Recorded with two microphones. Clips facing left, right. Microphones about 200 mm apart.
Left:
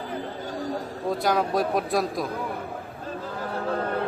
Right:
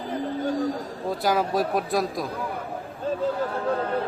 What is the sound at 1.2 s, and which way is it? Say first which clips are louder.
Speech: right 1 dB; centre (ahead or behind).